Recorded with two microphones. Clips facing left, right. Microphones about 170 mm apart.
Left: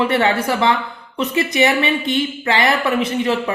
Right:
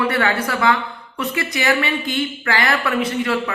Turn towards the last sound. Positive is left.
turn(degrees=20)  # may be behind; listen again after turning